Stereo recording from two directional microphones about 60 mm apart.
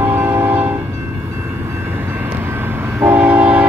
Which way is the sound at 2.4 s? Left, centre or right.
Right.